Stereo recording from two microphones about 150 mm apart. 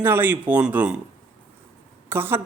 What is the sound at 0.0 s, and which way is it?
Speech, 15° right (ahead or behind).